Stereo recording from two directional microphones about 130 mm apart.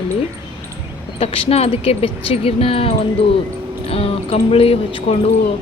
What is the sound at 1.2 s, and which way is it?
Speech, 45° left (ahead or behind).